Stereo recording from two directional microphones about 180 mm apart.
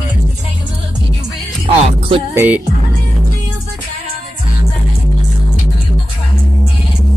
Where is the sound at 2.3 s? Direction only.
10° right (ahead or behind).